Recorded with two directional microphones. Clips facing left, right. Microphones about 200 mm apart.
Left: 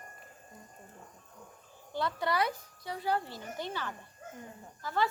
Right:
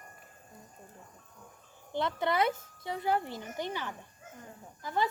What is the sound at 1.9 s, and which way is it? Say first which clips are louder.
Speech: right 2 dB; 20° right (ahead or behind).